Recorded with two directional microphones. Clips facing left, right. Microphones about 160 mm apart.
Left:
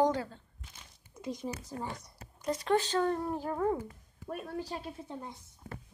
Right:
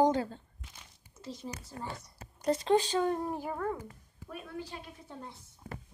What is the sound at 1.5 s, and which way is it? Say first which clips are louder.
Speech: left 4 dB; 10° left (ahead or behind).